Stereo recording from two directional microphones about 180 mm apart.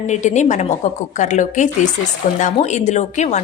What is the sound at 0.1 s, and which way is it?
A woman's voice, 40° left (ahead or behind).